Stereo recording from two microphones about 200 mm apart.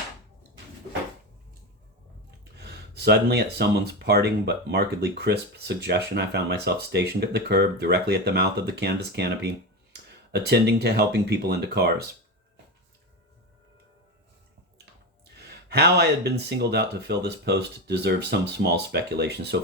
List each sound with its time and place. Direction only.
2.6 s speech: 55° right (ahead or behind)
15.4 s speech: 55° right (ahead or behind)